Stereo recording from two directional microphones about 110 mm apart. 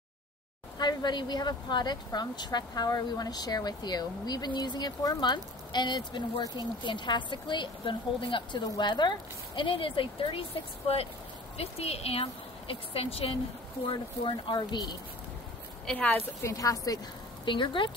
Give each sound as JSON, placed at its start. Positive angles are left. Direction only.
{"t": 0.7, "sound": "speech", "side_deg": 40}
{"t": 9.6, "sound": "speech", "side_deg": 50}
{"t": 11.5, "sound": "a woman's voice", "side_deg": 65}
{"t": 13.8, "sound": "speech", "side_deg": 50}
{"t": 15.9, "sound": "a woman's voice", "side_deg": 10}
{"t": 16.4, "sound": "speech", "side_deg": 30}
{"t": 17.5, "sound": "speech", "side_deg": 45}